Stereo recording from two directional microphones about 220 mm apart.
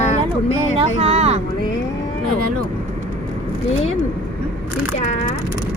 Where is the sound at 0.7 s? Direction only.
25° right (ahead or behind).